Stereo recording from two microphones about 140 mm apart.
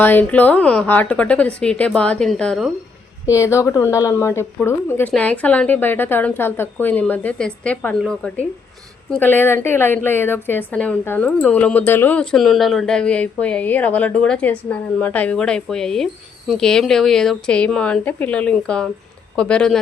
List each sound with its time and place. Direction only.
0.0 s a woman's voice: 15° left (ahead or behind)
3.2 s a woman's voice: 20° left (ahead or behind)